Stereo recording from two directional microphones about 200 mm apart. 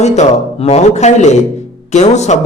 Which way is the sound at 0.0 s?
35° left (ahead or behind).